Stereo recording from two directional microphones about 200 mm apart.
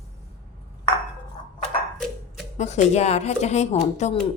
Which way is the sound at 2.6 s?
35° left (ahead or behind).